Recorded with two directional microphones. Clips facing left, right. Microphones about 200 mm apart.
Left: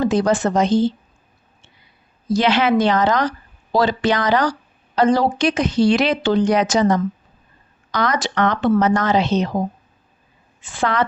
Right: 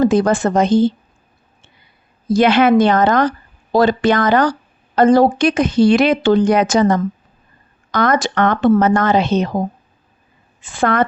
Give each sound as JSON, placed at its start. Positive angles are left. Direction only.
{"t": 0.0, "sound": "speech", "side_deg": -50}
{"t": 2.3, "sound": "speech", "side_deg": -55}
{"t": 10.8, "sound": "speech", "side_deg": -50}